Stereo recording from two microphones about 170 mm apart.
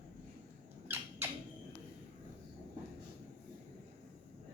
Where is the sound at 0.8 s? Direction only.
10° right (ahead or behind).